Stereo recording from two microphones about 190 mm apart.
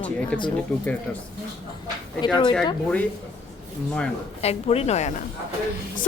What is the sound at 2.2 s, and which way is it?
Speech, 25° left (ahead or behind).